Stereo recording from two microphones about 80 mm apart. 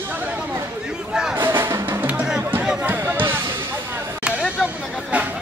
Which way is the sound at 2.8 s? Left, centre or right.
Right.